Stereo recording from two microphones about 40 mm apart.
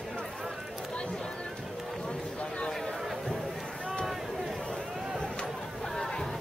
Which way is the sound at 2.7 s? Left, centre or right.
Centre.